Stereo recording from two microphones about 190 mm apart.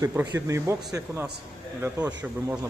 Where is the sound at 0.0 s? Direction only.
15° right (ahead or behind).